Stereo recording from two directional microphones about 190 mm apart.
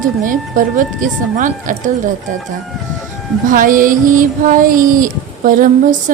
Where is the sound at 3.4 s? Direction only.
45° right (ahead or behind).